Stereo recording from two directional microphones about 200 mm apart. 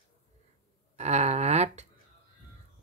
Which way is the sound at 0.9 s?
35° right (ahead or behind).